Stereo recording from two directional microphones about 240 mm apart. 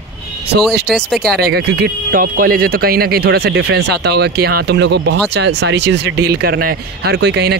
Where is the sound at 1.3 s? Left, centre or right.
Right.